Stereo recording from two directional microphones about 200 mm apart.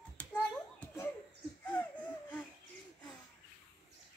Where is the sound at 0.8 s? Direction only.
15° left (ahead or behind).